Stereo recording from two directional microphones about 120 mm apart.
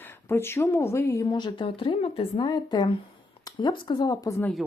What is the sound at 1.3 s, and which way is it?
Speech, 40° left (ahead or behind).